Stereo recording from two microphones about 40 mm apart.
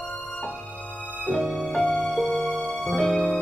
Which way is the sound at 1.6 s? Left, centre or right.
Left.